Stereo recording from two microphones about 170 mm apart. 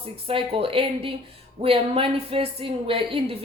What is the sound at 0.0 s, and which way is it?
A woman's voice, 35° right (ahead or behind).